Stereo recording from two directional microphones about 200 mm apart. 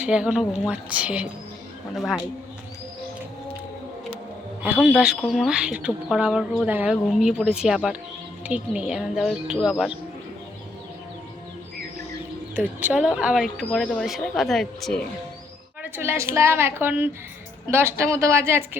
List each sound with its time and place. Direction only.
0.0 s a woman's voice: 5° right (ahead or behind)
4.6 s a woman's voice: 5° right (ahead or behind)
12.5 s a woman's voice: 10° right (ahead or behind)
15.8 s a woman's voice: 10° right (ahead or behind)